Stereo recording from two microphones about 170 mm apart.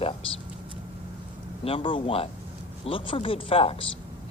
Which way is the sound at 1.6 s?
30° left (ahead or behind).